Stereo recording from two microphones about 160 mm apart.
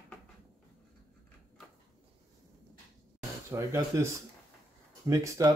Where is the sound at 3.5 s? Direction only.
15° right (ahead or behind).